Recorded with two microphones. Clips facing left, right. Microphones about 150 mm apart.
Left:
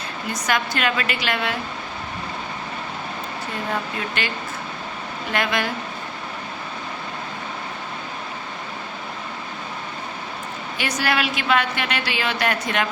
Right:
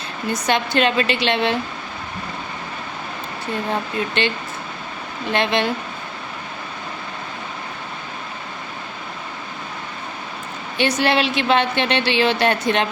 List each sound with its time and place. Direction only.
0.3 s a woman's voice: 25° right (ahead or behind)
3.7 s a woman's voice: 25° right (ahead or behind)
5.3 s a woman's voice: 25° right (ahead or behind)
10.8 s a woman's voice: 25° right (ahead or behind)